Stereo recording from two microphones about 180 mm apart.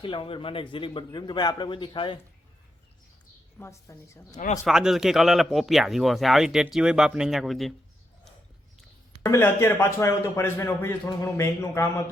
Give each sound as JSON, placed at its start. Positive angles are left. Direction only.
{"t": 0.0, "sound": "speech", "side_deg": 30}
{"t": 3.6, "sound": "speech", "side_deg": 15}
{"t": 4.4, "sound": "speech", "side_deg": 40}
{"t": 4.6, "sound": "speech", "side_deg": 0}
{"t": 9.2, "sound": "speech", "side_deg": 15}